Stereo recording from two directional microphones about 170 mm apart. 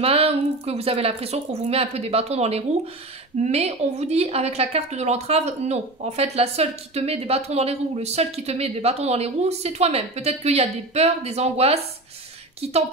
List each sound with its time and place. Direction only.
0.0 s speech: 35° right (ahead or behind)